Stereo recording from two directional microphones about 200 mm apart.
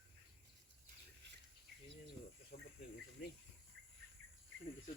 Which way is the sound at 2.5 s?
50° left (ahead or behind).